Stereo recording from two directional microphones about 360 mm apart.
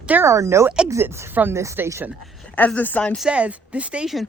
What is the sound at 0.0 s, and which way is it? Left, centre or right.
Speech, centre.